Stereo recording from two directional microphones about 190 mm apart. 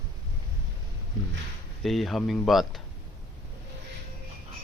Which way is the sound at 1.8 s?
Centre (ahead or behind).